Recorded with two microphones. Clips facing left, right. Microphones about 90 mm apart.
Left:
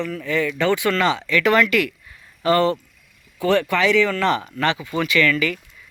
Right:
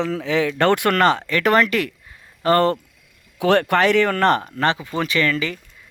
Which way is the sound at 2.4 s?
50° right (ahead or behind).